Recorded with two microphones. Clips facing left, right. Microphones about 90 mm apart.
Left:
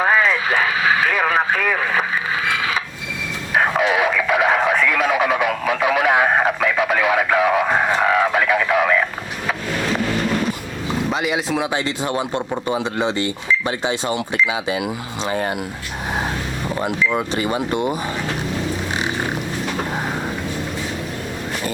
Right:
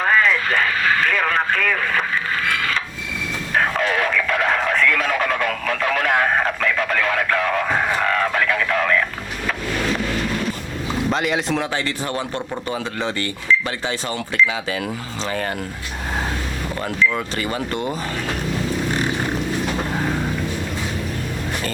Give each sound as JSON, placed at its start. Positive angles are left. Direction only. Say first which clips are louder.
{"t": 0.0, "sound": "speech", "louder": "left 1 dB", "side_deg": 10}
{"t": 3.5, "sound": "radio", "louder": "left 3 dB", "side_deg": 10}
{"t": 11.1, "sound": "speech", "louder": "right 1 dB", "side_deg": 5}
{"t": 16.6, "sound": "speech", "louder": "left 1 dB", "side_deg": 15}